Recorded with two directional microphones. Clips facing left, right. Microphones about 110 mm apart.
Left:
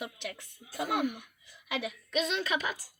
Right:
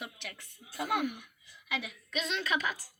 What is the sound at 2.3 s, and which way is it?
Speech, 15° left (ahead or behind).